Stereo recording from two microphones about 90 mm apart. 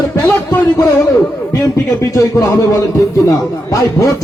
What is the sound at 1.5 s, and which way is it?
Speech, 35° left (ahead or behind).